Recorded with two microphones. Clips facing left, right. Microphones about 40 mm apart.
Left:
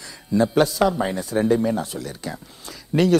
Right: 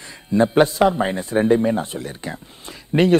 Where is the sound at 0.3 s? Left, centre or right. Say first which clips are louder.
Right 3 dB; right.